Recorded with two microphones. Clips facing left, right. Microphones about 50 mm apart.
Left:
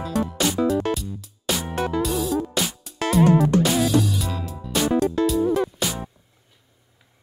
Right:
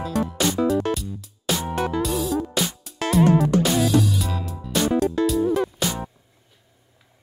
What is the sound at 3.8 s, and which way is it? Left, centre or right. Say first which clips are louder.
Music: even; centre.